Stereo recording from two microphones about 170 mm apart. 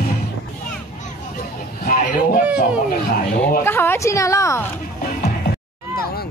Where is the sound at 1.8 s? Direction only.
55° left (ahead or behind).